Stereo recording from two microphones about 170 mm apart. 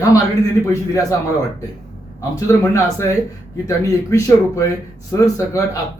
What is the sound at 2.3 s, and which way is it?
A man's voice, 15° left (ahead or behind).